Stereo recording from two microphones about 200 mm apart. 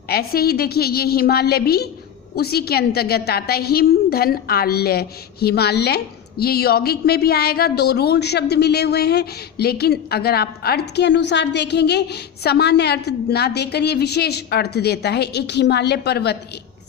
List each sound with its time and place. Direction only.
0.1 s a woman's voice: 50° left (ahead or behind)